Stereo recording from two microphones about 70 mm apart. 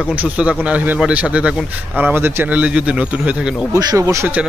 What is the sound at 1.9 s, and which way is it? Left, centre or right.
Speech, right.